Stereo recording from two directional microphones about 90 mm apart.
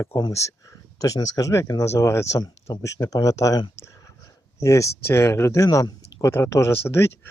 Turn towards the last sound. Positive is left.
turn(degrees=25)  # may be behind; listen again after turning